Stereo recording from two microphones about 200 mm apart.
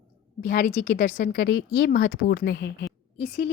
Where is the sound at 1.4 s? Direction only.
75° left (ahead or behind).